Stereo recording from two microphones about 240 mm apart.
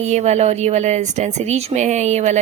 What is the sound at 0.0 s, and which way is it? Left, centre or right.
Speech, right.